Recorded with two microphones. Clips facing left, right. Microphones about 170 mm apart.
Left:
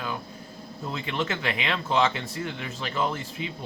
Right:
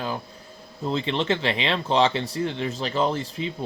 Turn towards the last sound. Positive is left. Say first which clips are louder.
# right 4 dB
turn(degrees=-35)  # may be behind; listen again after turning